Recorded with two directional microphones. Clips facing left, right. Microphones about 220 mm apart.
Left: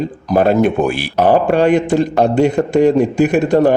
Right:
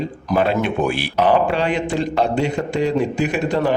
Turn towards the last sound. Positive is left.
turn(degrees=45)  # may be behind; listen again after turning